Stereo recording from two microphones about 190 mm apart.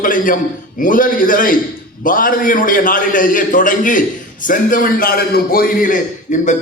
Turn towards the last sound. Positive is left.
turn(degrees=45)  # may be behind; listen again after turning